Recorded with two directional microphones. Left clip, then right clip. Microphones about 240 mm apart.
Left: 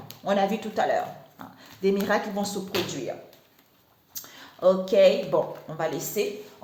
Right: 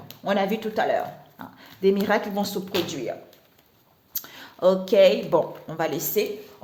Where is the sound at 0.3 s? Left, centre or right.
Right.